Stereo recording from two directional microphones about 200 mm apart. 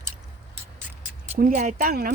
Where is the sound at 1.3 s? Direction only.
40° right (ahead or behind).